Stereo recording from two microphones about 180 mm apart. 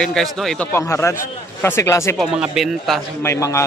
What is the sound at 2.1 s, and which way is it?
Speech, centre (ahead or behind).